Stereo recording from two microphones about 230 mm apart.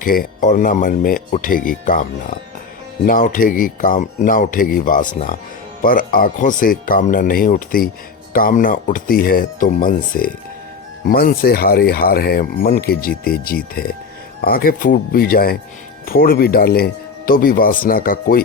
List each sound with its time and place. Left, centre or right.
0.0 s speech: left
3.1 s speech: left